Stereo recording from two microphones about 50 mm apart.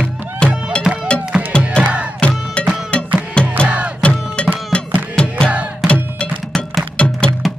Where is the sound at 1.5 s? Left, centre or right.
Centre.